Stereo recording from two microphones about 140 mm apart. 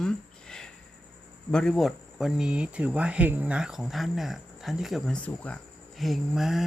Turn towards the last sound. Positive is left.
turn(degrees=0)  # may be behind; listen again after turning